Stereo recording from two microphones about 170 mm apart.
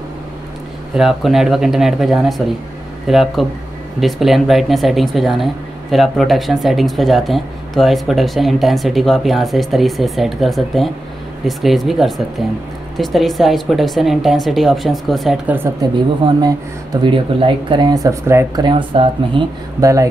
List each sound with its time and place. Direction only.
0.9 s speech: centre (ahead or behind); by 19.9 s 30° right (ahead or behind)